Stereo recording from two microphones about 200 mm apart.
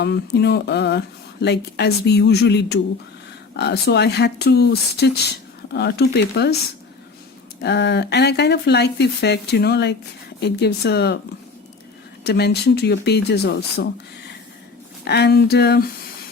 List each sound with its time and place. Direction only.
0.0 s speech: 55° left (ahead or behind)
7.6 s speech: 60° left (ahead or behind)
12.2 s speech: 55° left (ahead or behind)
15.0 s speech: 55° left (ahead or behind)